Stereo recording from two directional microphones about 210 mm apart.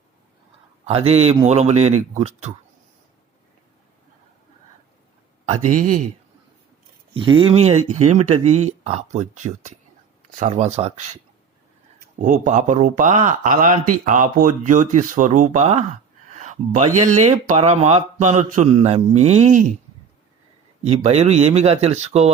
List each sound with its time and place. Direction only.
0.9 s a man's voice: 30° right (ahead or behind)
7.1 s a man's voice: 25° right (ahead or behind)
12.2 s speech: 35° right (ahead or behind)
20.8 s speech: 30° right (ahead or behind)